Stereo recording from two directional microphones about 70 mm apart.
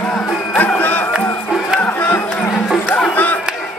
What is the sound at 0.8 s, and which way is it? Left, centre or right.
Music, left.